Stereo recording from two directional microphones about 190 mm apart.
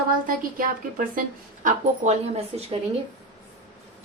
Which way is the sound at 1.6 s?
35° right (ahead or behind).